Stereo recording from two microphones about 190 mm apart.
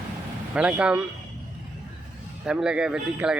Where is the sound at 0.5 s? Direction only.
5° right (ahead or behind).